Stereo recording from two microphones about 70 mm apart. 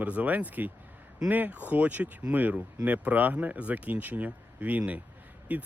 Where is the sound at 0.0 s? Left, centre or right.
Right.